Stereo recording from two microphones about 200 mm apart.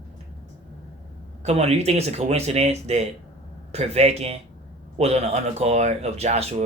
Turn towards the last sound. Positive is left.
turn(degrees=-30)  # may be behind; listen again after turning